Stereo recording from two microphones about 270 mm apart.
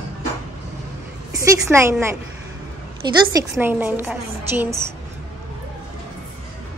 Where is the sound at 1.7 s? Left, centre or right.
Centre.